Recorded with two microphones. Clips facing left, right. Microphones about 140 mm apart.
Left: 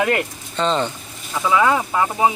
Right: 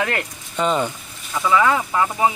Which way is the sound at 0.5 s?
10° right (ahead or behind).